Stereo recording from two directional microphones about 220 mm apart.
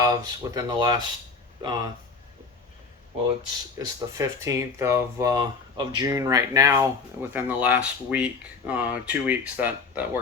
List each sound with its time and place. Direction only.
0.0 s speech: 15° right (ahead or behind)
3.8 s speech: 15° right (ahead or behind)